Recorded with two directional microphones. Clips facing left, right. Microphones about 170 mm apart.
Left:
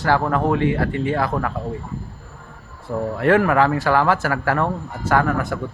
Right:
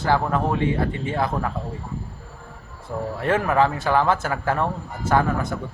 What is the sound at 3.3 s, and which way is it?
A man's voice, 20° right (ahead or behind).